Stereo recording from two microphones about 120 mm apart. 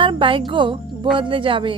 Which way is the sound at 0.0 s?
45° right (ahead or behind).